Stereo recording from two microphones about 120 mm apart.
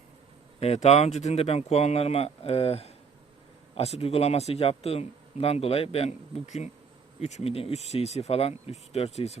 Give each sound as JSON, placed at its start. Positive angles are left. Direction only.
{"t": 0.6, "sound": "speech", "side_deg": 60}